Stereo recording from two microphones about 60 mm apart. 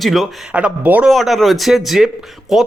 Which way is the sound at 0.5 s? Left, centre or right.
Right.